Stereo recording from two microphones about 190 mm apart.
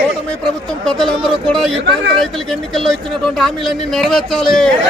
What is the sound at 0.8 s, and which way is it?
A man's voice, centre (ahead or behind).